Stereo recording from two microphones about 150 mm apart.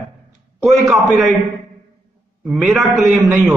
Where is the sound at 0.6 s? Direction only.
Centre (ahead or behind).